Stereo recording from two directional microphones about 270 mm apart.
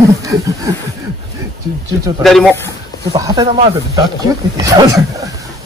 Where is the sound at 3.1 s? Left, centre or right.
Centre.